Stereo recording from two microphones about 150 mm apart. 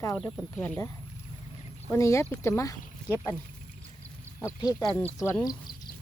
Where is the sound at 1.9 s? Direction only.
20° left (ahead or behind).